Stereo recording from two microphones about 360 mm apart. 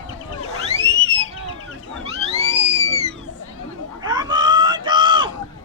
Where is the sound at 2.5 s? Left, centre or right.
Centre.